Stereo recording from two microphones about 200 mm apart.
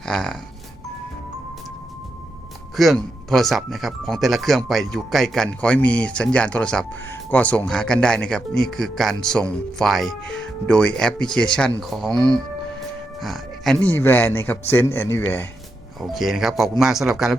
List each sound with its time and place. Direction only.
0.0 s speech: 5° left (ahead or behind)
2.7 s speech: centre (ahead or behind)
12.1 s speech: 20° right (ahead or behind)
13.1 s speech: centre (ahead or behind)
16.0 s speech: centre (ahead or behind)